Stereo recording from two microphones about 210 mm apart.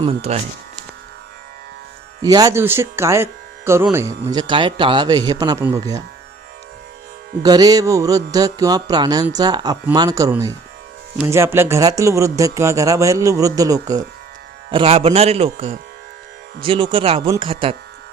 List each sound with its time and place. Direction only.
0.0 s speech: 30° right (ahead or behind)
2.2 s music: 20° right (ahead or behind)
7.4 s music: 20° right (ahead or behind)
14.7 s speech: 25° right (ahead or behind)